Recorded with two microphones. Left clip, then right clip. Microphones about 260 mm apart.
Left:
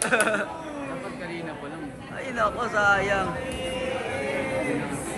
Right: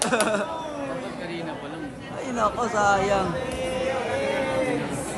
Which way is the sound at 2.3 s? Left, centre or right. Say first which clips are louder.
Right 1 dB; right.